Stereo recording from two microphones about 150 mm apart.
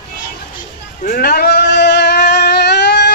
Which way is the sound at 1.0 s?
70° left (ahead or behind).